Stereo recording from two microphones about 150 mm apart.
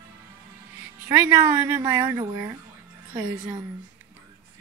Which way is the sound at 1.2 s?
15° right (ahead or behind).